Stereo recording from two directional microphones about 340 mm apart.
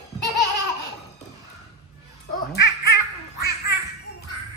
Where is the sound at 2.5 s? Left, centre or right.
Left.